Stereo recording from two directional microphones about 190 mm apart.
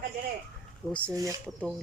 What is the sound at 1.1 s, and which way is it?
Speech, 20° right (ahead or behind).